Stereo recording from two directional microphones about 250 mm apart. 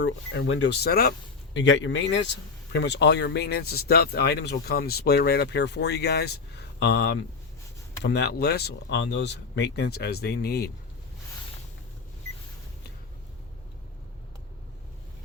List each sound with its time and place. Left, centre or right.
0.0 s speech: left